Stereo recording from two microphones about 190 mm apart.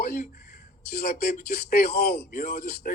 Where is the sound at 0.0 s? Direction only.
50° left (ahead or behind).